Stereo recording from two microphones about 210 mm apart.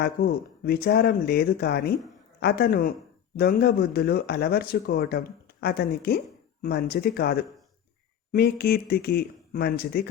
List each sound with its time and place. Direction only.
0.0 s speech: 50° left (ahead or behind)